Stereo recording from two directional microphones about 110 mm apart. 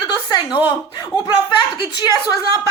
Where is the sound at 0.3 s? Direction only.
45° left (ahead or behind).